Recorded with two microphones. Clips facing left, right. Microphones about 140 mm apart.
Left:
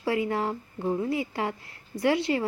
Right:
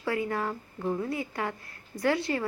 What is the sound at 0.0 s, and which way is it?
A woman's voice, 25° left (ahead or behind).